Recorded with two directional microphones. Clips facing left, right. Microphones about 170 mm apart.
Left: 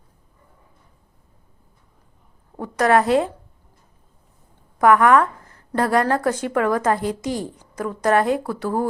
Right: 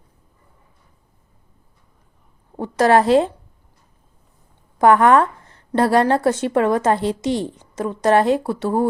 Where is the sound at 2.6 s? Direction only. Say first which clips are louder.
Right 3 dB; 30° right (ahead or behind).